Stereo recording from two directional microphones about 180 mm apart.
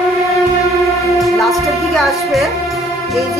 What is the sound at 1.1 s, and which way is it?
Music, centre (ahead or behind).